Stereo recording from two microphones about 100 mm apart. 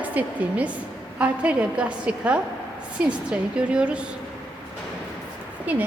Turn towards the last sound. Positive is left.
turn(degrees=-15)  # may be behind; listen again after turning